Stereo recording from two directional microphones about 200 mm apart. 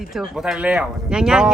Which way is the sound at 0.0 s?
Centre (ahead or behind).